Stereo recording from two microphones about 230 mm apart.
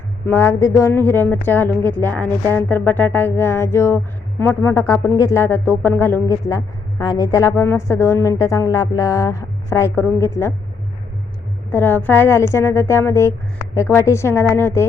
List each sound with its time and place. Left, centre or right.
0.3 s speech: centre
11.7 s speech: centre